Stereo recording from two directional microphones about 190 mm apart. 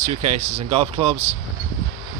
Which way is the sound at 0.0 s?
35° right (ahead or behind).